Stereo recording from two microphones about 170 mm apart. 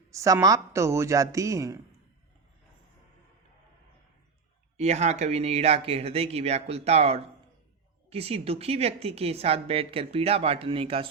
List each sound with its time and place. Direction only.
0.1 s a woman's voice: 20° right (ahead or behind)
4.8 s a woman's voice: 40° right (ahead or behind)